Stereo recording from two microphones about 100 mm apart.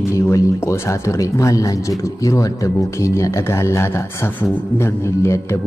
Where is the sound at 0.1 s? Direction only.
30° left (ahead or behind).